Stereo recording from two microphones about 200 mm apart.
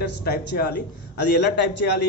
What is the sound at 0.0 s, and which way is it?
A man's voice, 50° left (ahead or behind).